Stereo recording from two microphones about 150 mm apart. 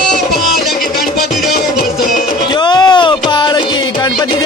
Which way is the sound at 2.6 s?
30° left (ahead or behind).